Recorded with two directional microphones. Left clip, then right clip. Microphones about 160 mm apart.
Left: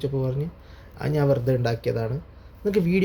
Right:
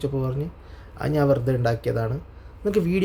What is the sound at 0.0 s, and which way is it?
Speech, 20° right (ahead or behind).